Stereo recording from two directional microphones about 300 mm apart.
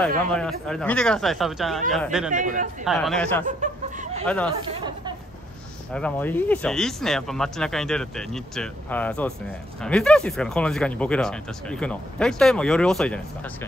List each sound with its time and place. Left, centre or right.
0.3 s speech: centre
2.3 s speech: right
2.8 s speech: centre
3.4 s chuckle: right
4.7 s speech: centre
5.9 s speech: centre